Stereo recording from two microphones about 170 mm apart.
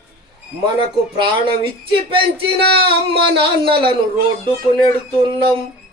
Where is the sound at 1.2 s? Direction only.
30° right (ahead or behind).